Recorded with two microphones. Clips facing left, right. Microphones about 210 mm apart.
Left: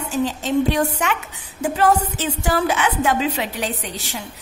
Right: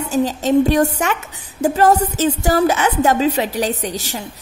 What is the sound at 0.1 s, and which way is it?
A woman's voice, 40° right (ahead or behind).